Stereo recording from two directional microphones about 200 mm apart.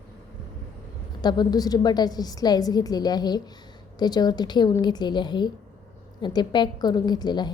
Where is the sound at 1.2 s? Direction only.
20° left (ahead or behind).